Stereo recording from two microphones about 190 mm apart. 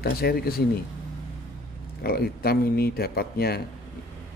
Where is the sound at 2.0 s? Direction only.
55° left (ahead or behind).